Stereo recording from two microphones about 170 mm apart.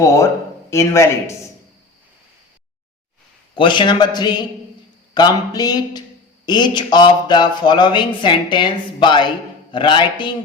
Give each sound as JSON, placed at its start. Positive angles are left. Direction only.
{"t": 0.0, "sound": "speech", "side_deg": 20}
{"t": 3.5, "sound": "speech", "side_deg": 30}